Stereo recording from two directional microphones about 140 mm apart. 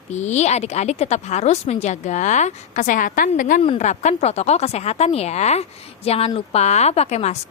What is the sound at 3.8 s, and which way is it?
Speech, 55° left (ahead or behind).